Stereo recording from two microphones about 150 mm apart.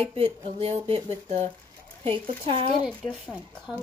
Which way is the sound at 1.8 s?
35° right (ahead or behind).